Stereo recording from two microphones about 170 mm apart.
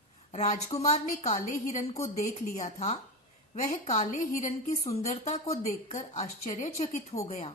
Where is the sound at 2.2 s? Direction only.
40° left (ahead or behind).